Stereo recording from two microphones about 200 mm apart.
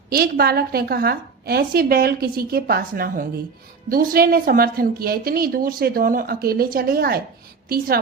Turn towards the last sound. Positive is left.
turn(degrees=-50)  # may be behind; listen again after turning